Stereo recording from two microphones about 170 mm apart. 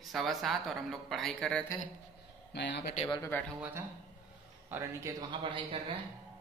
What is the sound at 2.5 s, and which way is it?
Speech, 90° left.